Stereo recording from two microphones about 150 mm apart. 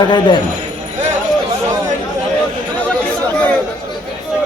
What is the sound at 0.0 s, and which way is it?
Speech, 30° left (ahead or behind).